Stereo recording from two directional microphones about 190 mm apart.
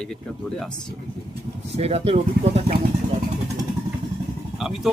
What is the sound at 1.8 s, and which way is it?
Speech, 30° right (ahead or behind).